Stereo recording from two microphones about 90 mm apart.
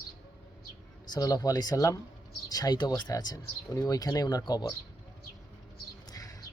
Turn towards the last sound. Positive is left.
turn(degrees=45)  # may be behind; listen again after turning